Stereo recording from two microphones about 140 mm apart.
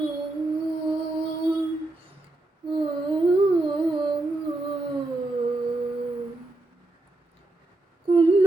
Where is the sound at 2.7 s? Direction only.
30° right (ahead or behind).